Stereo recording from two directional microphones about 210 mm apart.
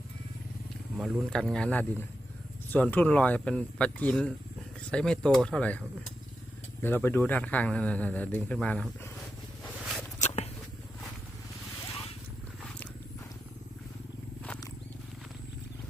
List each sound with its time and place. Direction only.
0.9 s speech: centre (ahead or behind)
6.8 s speech: 10° left (ahead or behind)
10.2 s a sound: 30° left (ahead or behind)